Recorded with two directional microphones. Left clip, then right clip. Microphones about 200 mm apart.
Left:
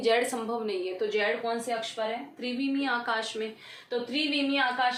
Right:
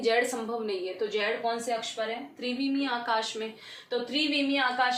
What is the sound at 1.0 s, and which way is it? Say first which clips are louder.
A woman's voice: left 1 dB; 15° left (ahead or behind).